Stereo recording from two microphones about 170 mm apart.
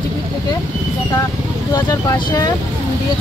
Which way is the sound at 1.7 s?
20° left (ahead or behind).